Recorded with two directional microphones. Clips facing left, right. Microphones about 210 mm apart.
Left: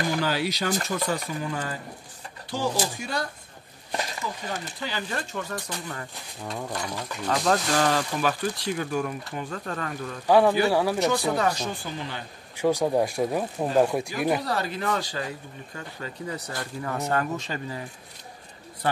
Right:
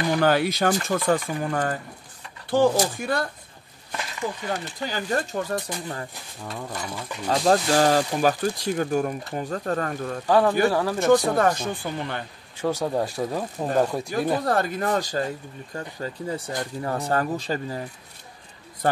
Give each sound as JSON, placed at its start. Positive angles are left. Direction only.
{"t": 0.1, "sound": "speech", "side_deg": -55}
{"t": 4.5, "sound": "speech", "side_deg": -45}
{"t": 6.4, "sound": "speech", "side_deg": 0}
{"t": 7.2, "sound": "speech", "side_deg": -35}
{"t": 10.2, "sound": "speech", "side_deg": 10}
{"t": 11.0, "sound": "speech", "side_deg": -50}
{"t": 12.6, "sound": "speech", "side_deg": 15}
{"t": 14.4, "sound": "speech", "side_deg": -50}
{"t": 15.7, "sound": "speech", "side_deg": -35}